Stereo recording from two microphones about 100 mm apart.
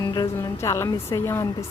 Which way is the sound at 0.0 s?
45° left (ahead or behind).